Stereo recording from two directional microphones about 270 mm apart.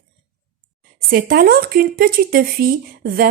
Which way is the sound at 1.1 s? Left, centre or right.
Right.